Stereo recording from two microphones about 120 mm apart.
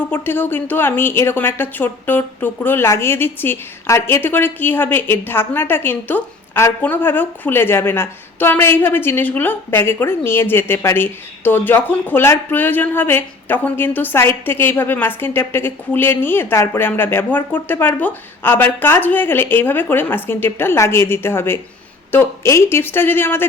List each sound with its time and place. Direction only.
0.1 s a woman's voice: 15° left (ahead or behind)